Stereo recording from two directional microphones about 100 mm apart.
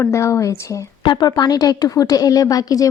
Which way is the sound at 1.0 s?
45° left (ahead or behind).